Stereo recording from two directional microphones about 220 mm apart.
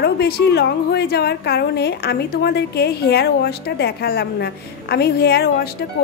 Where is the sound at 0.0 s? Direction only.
45° left (ahead or behind).